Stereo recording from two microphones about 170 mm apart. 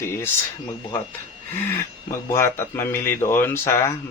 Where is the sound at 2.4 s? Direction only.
15° left (ahead or behind).